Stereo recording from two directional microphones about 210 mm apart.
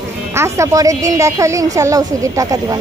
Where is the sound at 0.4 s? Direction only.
15° right (ahead or behind).